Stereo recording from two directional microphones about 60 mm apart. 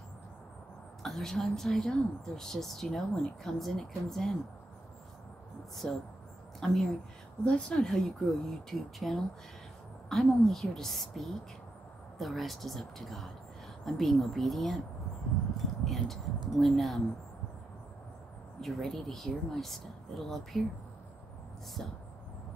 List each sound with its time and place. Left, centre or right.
1.0 s speech: centre
5.8 s speech: centre
6.6 s speech: centre
7.4 s speech: centre
18.6 s speech: centre